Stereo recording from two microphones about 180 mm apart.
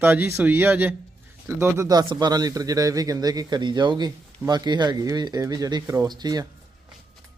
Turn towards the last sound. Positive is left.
turn(degrees=-20)  # may be behind; listen again after turning